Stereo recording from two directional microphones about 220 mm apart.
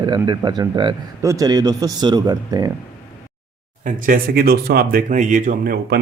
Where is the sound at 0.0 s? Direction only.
20° right (ahead or behind).